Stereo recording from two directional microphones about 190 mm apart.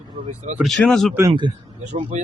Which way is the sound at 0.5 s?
Centre (ahead or behind).